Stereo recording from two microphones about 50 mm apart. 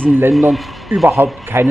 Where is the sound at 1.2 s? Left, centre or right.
Right.